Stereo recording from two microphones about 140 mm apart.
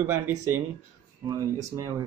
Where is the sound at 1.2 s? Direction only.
25° right (ahead or behind).